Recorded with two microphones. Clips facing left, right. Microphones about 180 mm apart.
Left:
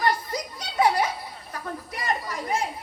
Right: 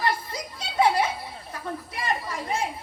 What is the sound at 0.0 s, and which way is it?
Children playing, 25° right (ahead or behind).